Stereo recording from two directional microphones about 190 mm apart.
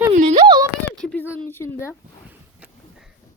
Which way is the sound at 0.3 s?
25° right (ahead or behind).